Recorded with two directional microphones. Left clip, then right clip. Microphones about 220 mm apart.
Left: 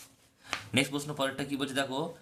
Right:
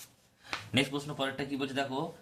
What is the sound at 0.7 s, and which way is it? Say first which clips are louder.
Speech: left 1 dB; 15° left (ahead or behind).